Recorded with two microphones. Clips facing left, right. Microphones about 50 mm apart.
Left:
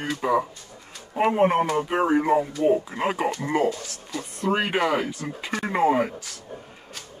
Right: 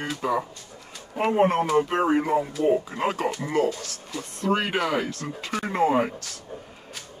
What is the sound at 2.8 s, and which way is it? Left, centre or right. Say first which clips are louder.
Speech: left 1 dB; centre.